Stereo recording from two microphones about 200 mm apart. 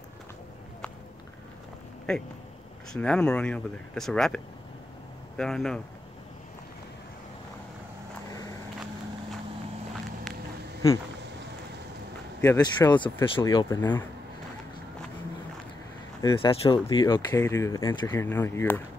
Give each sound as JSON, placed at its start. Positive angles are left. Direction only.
{"t": 2.1, "sound": "speech", "side_deg": 0}
{"t": 5.4, "sound": "speech", "side_deg": 0}
{"t": 12.4, "sound": "speech", "side_deg": 15}
{"t": 16.2, "sound": "speech", "side_deg": 25}